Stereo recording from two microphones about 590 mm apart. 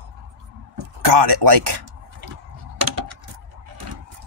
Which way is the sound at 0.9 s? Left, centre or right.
Right.